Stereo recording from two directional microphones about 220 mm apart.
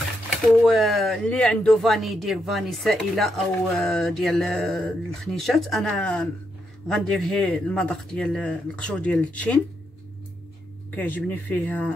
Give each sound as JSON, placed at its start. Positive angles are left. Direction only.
{"t": 0.5, "sound": "speech", "side_deg": 0}
{"t": 11.0, "sound": "speech", "side_deg": 5}